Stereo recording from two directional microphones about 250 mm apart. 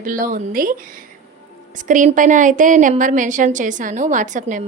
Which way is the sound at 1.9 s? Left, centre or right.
Right.